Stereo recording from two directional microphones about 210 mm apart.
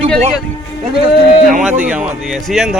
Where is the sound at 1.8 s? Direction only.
5° right (ahead or behind).